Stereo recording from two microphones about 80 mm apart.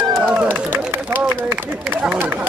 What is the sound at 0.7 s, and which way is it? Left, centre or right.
Run, right.